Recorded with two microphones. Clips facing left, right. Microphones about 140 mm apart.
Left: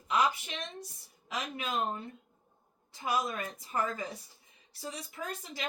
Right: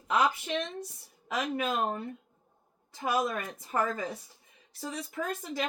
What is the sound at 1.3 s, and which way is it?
Speech, 55° right (ahead or behind).